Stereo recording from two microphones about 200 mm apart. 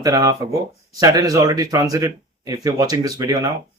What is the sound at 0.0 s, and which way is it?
Speech, 20° right (ahead or behind).